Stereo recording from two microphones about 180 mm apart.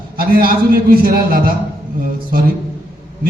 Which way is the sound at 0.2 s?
55° right (ahead or behind).